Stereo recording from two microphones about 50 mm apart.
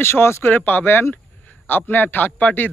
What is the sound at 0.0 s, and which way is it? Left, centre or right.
Speech, left.